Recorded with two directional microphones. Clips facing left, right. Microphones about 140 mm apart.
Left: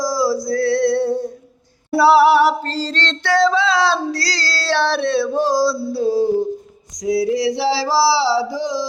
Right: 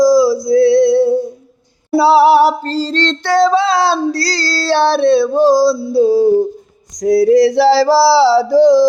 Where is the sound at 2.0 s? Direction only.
20° right (ahead or behind).